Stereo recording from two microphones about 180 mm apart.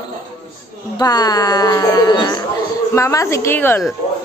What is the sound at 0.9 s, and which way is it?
A woman's voice, 20° left (ahead or behind).